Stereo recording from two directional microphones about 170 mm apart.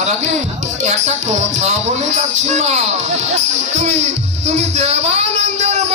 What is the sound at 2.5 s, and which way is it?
Speech, 40° right (ahead or behind).